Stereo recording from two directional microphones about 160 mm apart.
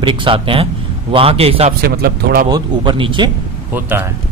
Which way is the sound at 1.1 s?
35° right (ahead or behind).